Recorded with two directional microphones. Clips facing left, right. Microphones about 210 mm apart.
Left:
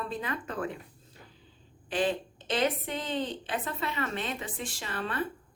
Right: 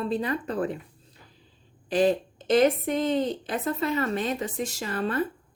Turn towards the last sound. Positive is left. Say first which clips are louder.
# right 6 dB
turn(degrees=-40)  # may be behind; listen again after turning